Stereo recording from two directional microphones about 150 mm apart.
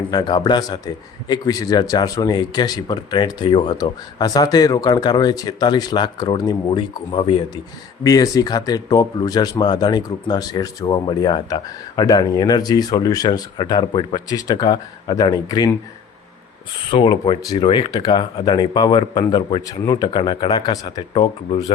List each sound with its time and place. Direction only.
0.1 s speech: 25° left (ahead or behind)
8.0 s speech: 25° left (ahead or behind)
16.9 s speech: 35° left (ahead or behind)